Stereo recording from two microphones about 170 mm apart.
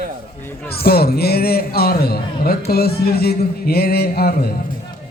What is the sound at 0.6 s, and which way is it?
A man's voice, 65° left (ahead or behind).